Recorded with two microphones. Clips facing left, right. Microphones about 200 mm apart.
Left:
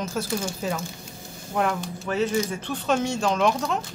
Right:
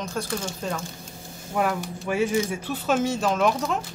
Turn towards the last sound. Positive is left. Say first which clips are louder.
# even
turn(degrees=0)  # may be behind; listen again after turning